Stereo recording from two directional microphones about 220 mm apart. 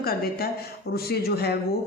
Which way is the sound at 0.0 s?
45° left (ahead or behind).